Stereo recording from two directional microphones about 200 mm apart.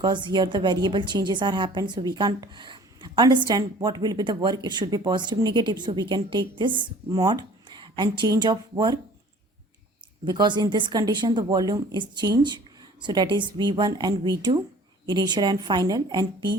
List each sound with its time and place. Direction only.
0.0 s a woman's voice: 20° right (ahead or behind)
10.2 s a woman's voice: 20° right (ahead or behind)